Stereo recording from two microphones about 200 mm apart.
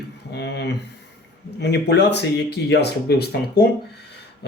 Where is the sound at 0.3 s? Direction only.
60° left (ahead or behind).